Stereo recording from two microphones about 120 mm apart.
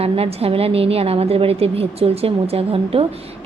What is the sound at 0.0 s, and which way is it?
A woman's voice, 55° right (ahead or behind).